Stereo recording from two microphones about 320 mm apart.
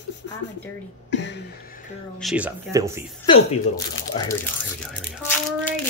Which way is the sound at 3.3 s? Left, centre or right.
Centre.